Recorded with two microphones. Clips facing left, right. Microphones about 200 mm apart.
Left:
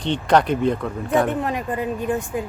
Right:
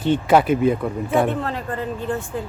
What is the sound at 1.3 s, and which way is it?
A woman's voice, 15° left (ahead or behind).